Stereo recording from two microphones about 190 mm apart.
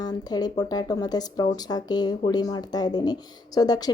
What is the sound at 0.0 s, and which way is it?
Speech, 20° left (ahead or behind).